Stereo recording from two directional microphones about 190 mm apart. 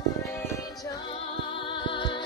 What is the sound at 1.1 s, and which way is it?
Music, 30° left (ahead or behind).